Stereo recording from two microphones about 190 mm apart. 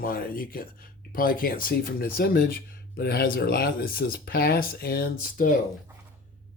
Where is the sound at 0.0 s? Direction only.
50° left (ahead or behind).